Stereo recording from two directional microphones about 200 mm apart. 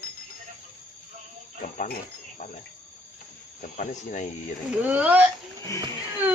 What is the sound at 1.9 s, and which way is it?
Speech, 35° left (ahead or behind).